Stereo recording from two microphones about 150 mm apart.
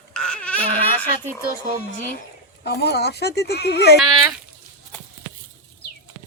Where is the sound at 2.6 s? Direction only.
90° left.